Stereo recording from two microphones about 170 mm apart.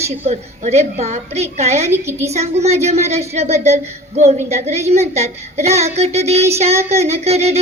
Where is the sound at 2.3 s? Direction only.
40° right (ahead or behind).